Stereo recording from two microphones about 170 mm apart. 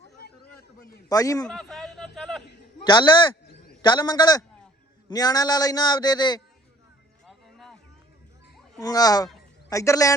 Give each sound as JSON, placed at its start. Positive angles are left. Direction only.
{"t": 0.2, "sound": "chatter", "side_deg": 70}
{"t": 1.0, "sound": "a man's voice", "side_deg": 20}
{"t": 1.5, "sound": "a sound", "side_deg": 5}
{"t": 2.8, "sound": "a man's voice", "side_deg": 25}
{"t": 7.3, "sound": "music", "side_deg": 0}
{"t": 8.8, "sound": "a man's voice", "side_deg": 20}